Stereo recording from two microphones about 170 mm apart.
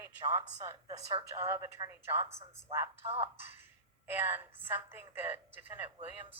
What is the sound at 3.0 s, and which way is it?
Speech, 35° right (ahead or behind).